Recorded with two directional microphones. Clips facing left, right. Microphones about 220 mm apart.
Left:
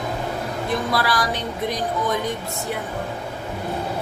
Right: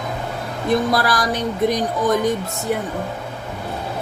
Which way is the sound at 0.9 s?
45° right (ahead or behind).